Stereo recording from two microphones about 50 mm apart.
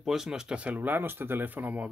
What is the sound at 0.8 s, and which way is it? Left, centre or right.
Speech, right.